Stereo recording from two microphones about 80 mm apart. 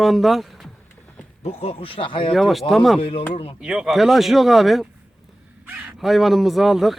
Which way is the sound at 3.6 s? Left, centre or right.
Centre.